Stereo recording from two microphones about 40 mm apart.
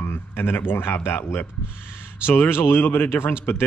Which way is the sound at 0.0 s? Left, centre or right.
Left.